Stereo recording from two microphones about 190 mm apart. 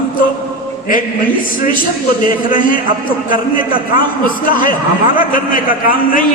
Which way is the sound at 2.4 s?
45° left (ahead or behind).